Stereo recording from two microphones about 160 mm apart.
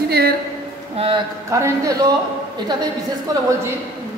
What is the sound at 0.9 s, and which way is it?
Speech, 35° right (ahead or behind).